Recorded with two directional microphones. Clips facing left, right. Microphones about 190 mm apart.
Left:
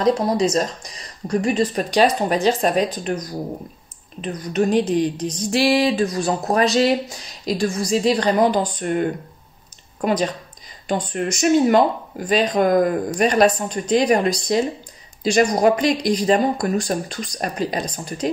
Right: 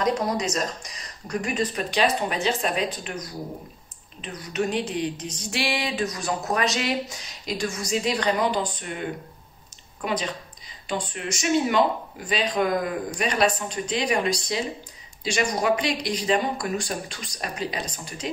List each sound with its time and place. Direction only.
0.0 s speech: 30° left (ahead or behind)
4.2 s speech: 40° left (ahead or behind)
10.0 s speech: 45° left (ahead or behind)